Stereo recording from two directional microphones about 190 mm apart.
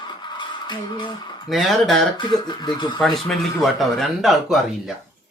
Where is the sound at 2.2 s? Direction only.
25° left (ahead or behind).